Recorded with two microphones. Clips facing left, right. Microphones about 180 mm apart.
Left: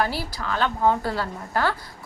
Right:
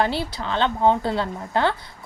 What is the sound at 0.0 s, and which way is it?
A woman's voice, 25° right (ahead or behind).